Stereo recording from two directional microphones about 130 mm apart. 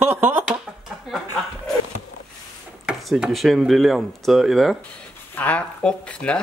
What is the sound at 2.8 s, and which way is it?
Speech, 5° right (ahead or behind).